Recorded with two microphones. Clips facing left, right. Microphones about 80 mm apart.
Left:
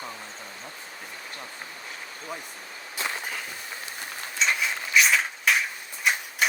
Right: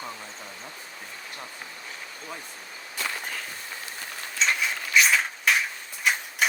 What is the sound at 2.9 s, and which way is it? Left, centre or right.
Walk, left.